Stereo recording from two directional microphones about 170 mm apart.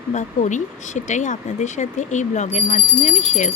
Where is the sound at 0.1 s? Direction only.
45° left (ahead or behind).